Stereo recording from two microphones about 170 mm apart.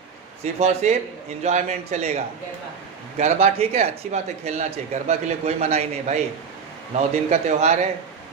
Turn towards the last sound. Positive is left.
turn(degrees=-40)  # may be behind; listen again after turning